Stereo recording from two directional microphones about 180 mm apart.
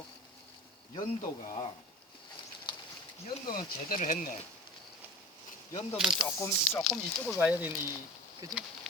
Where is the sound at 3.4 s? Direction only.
50° left (ahead or behind).